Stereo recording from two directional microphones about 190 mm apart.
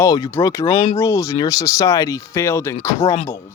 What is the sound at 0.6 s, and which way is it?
Speech, 30° left (ahead or behind).